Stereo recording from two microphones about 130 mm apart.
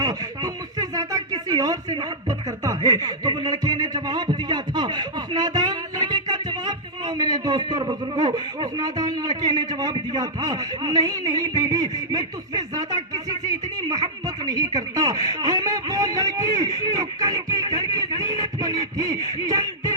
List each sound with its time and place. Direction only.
0.0 s speech: 30° right (ahead or behind)